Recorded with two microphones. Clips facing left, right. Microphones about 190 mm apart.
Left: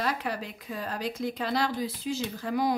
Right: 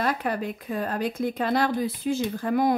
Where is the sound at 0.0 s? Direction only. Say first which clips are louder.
Right 5 dB; 50° right (ahead or behind).